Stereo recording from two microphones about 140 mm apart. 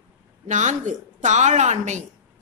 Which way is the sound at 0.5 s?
60° right (ahead or behind).